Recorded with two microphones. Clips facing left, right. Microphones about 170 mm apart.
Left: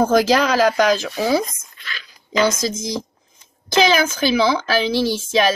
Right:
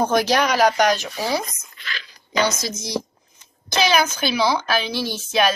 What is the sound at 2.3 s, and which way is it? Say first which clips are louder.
A woman's voice: left 4 dB; 90° left.